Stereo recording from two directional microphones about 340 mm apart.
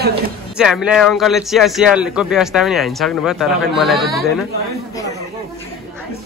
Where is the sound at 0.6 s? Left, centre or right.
Centre.